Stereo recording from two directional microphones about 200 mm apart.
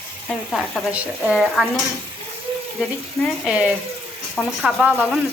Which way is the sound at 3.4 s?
5° right (ahead or behind).